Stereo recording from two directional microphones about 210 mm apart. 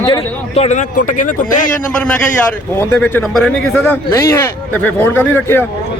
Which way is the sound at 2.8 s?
10° left (ahead or behind).